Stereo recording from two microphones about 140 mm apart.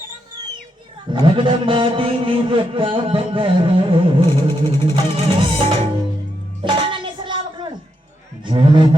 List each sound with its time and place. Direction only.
1.1 s a man's voice: 35° right (ahead or behind)
6.7 s music: 35° right (ahead or behind)
8.4 s a man's voice: 35° right (ahead or behind)